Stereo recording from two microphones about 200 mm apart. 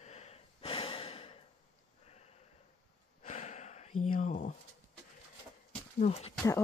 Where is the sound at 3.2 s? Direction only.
35° left (ahead or behind).